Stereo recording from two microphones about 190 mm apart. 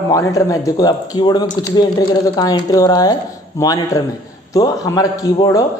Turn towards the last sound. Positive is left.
turn(degrees=20)  # may be behind; listen again after turning